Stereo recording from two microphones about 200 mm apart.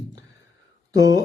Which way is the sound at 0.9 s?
20° right (ahead or behind).